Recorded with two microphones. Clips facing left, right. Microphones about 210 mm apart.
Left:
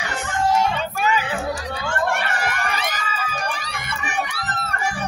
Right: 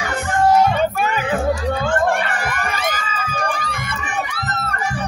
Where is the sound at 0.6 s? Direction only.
50° right (ahead or behind).